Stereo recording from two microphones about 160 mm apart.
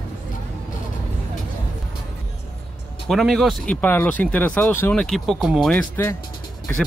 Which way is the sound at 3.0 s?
Centre (ahead or behind).